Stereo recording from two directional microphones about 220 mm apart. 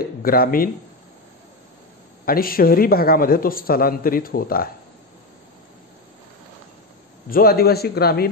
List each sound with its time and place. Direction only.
0.2 s a man's voice: 40° left (ahead or behind)
2.2 s a man's voice: 40° left (ahead or behind)
7.2 s a man's voice: 40° left (ahead or behind)